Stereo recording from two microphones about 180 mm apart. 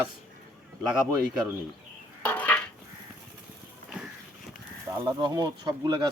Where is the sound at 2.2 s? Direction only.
10° left (ahead or behind).